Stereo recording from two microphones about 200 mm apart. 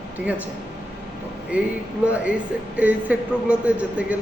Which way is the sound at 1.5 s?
5° right (ahead or behind).